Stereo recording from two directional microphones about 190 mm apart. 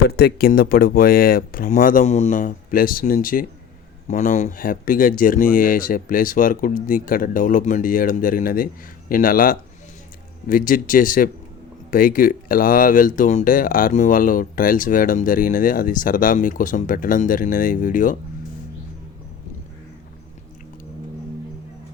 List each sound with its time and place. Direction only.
0.1 s speech: 55° left (ahead or behind)